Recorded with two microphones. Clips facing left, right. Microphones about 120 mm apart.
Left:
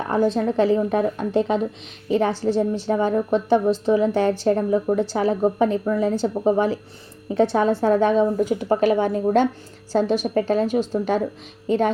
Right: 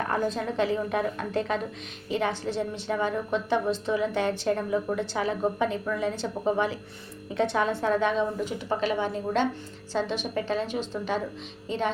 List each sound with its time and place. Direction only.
0.3 s a woman's voice: 35° left (ahead or behind)